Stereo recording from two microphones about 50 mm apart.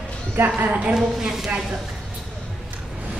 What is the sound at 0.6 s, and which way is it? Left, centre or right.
Speech, right.